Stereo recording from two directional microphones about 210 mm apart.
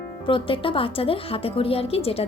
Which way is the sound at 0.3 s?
25° left (ahead or behind).